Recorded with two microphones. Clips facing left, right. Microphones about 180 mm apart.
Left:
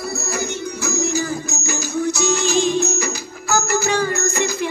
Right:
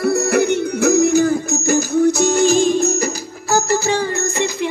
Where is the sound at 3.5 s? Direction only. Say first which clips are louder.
Right 3 dB; 30° right (ahead or behind).